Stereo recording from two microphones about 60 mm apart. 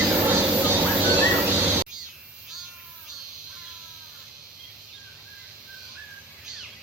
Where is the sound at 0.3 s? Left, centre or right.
Right.